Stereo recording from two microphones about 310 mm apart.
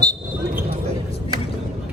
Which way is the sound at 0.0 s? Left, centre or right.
Centre.